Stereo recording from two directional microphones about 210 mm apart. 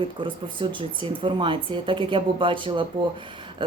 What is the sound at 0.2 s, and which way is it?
Speech, 25° right (ahead or behind).